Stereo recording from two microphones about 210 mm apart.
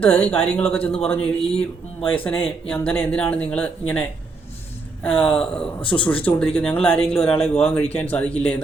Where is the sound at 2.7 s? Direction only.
5° left (ahead or behind).